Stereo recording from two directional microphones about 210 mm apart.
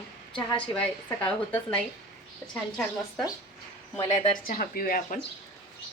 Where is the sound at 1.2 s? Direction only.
5° left (ahead or behind).